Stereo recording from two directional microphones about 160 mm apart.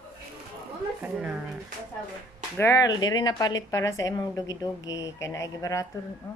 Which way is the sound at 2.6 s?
20° left (ahead or behind).